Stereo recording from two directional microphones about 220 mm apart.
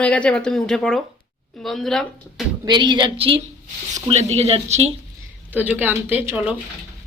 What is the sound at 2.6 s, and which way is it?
A woman's voice, 20° right (ahead or behind).